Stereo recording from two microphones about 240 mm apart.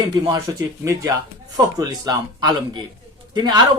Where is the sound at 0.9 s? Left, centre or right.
Centre.